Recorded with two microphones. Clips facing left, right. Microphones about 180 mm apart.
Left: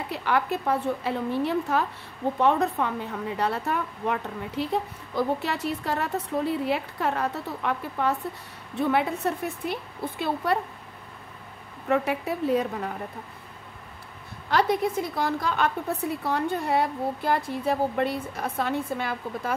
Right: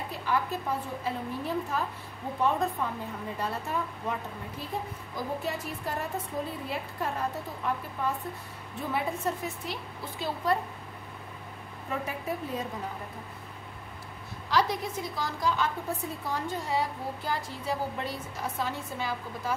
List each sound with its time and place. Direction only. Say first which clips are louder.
0.1 s a woman's voice: left 5 dB; 70° left (ahead or behind)
11.9 s a woman's voice: left 8 dB; 70° left (ahead or behind)
14.5 s a woman's voice: left 5 dB; 55° left (ahead or behind)